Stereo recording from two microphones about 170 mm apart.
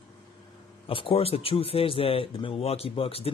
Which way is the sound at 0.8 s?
35° left (ahead or behind).